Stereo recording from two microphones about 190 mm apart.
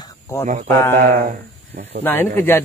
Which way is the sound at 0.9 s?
45° right (ahead or behind).